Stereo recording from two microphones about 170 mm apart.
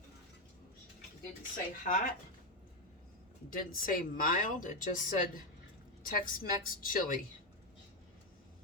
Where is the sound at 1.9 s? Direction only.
55° left (ahead or behind).